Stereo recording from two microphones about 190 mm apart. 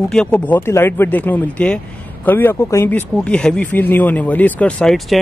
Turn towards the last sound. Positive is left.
turn(degrees=5)  # may be behind; listen again after turning